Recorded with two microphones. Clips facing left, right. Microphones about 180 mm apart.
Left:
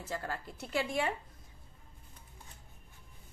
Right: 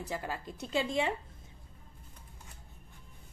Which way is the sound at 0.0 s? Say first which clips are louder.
Right 1 dB; 15° right (ahead or behind).